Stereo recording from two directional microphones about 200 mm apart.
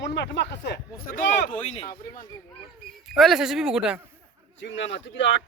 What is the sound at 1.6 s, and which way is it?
Speech, 30° left (ahead or behind).